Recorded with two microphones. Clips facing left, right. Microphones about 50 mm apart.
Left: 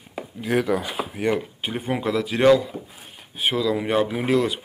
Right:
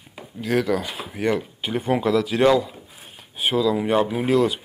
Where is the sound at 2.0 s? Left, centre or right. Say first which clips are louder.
Right 1 dB; left.